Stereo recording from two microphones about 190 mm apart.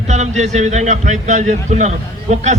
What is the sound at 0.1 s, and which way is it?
A man's voice, 35° right (ahead or behind).